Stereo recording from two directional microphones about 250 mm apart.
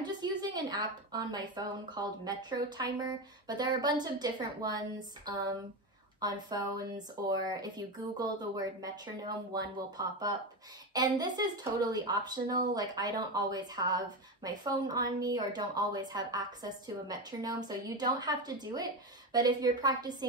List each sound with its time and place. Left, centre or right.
0.0 s speech: centre